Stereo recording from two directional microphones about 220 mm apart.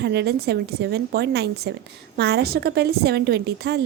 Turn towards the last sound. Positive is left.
turn(degrees=-50)  # may be behind; listen again after turning